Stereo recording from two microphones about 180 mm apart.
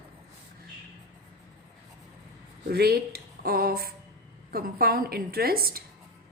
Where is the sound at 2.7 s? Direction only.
60° right (ahead or behind).